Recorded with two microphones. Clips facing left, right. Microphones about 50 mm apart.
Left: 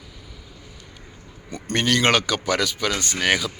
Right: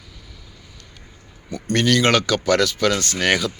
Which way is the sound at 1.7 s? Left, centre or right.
Left.